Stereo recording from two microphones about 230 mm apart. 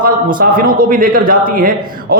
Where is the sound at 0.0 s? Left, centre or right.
Right.